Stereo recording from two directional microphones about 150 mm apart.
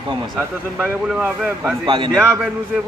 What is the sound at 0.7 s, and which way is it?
A man's voice, 10° right (ahead or behind).